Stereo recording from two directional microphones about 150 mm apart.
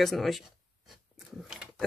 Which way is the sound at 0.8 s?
5° right (ahead or behind).